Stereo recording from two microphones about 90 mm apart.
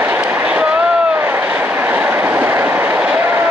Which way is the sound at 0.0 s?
20° right (ahead or behind).